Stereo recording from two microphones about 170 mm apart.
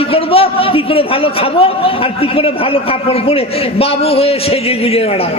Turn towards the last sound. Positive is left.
turn(degrees=35)  # may be behind; listen again after turning